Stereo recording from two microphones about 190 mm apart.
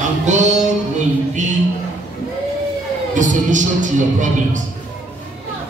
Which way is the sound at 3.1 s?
40° right (ahead or behind).